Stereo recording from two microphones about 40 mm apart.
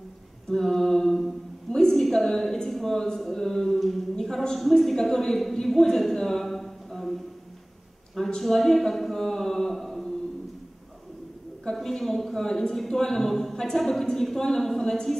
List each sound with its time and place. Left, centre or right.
0.5 s a woman's voice: centre
8.4 s speech: centre
11.7 s a sound: centre
12.0 s a woman's voice: centre